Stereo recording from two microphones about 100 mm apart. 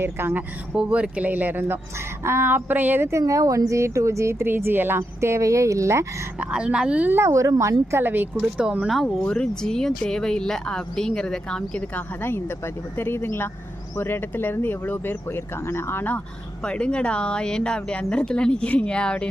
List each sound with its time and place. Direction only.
0.0 s a woman's voice: 20° right (ahead or behind)
0.8 s a woman's voice: 10° right (ahead or behind); by 6.1 s 30° right (ahead or behind)
6.4 s speech: 10° right (ahead or behind)
7.2 s a woman's voice: 30° right (ahead or behind)
8.4 s speech: 10° right (ahead or behind)
8.9 s speech: centre (ahead or behind)
11.9 s speech: 20° left (ahead or behind)